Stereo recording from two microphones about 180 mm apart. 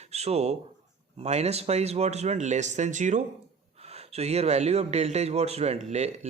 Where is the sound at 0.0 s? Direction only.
35° right (ahead or behind).